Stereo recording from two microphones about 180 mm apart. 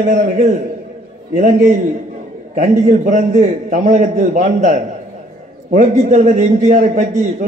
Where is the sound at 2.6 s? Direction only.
45° right (ahead or behind).